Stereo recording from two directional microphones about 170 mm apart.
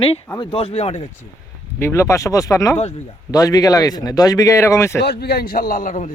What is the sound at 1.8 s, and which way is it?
Speech, 15° left (ahead or behind).